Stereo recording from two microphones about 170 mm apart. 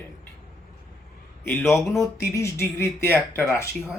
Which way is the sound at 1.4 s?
15° left (ahead or behind).